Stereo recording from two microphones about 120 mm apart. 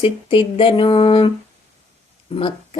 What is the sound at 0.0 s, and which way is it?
Speech, 45° left (ahead or behind).